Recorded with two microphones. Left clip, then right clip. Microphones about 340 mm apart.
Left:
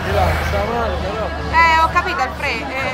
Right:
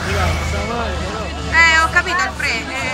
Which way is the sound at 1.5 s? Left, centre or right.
Centre.